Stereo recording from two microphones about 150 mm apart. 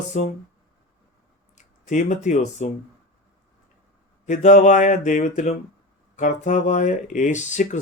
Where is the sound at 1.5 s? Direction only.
55° left (ahead or behind).